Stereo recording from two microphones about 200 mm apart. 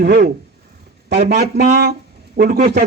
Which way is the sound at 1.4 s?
55° right (ahead or behind).